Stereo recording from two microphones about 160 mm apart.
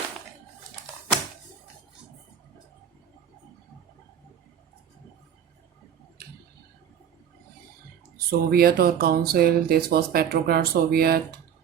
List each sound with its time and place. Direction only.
8.3 s speech: 70° right (ahead or behind)